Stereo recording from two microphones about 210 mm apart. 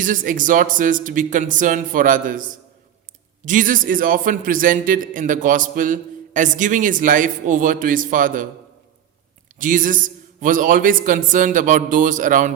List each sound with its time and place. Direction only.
0.0 s a man's voice: 40° right (ahead or behind)
9.6 s a man's voice: 40° right (ahead or behind)